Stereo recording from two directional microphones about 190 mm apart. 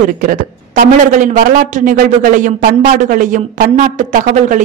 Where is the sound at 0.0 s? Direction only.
45° right (ahead or behind).